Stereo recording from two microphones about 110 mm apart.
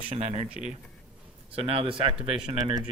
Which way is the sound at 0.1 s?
80° right.